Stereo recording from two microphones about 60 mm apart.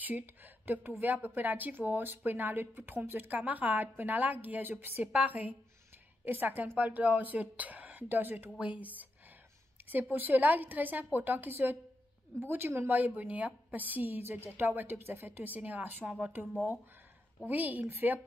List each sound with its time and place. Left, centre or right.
0.0 s speech: right
8.5 s speech: right
10.1 s speech: right
17.5 s speech: right